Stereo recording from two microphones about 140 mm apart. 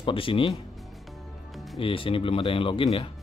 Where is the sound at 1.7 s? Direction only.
40° left (ahead or behind).